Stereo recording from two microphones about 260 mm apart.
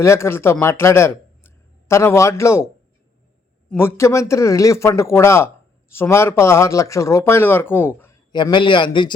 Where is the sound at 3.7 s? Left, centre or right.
Centre.